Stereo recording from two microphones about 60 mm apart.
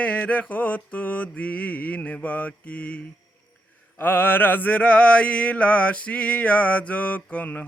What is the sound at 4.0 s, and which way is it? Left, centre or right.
Mantra, left.